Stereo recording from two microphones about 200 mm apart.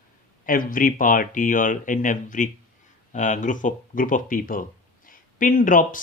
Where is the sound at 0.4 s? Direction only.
45° left (ahead or behind).